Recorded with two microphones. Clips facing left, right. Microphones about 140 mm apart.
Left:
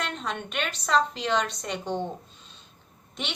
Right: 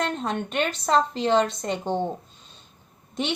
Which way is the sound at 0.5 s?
40° right (ahead or behind).